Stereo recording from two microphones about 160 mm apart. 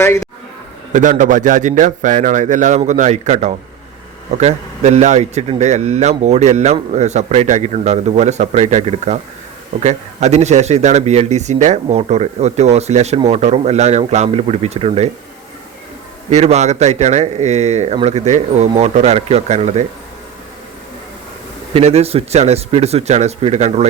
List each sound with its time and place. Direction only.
0.0 s speech: 15° left (ahead or behind)
0.9 s a man's voice: 50° right (ahead or behind)
16.3 s a man's voice: 45° right (ahead or behind)
21.7 s speech: 40° right (ahead or behind)